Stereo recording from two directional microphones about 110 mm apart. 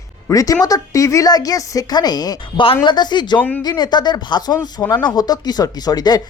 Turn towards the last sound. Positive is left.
turn(degrees=35)  # may be behind; listen again after turning